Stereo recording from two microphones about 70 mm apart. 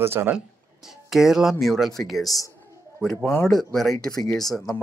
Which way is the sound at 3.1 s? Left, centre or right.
Left.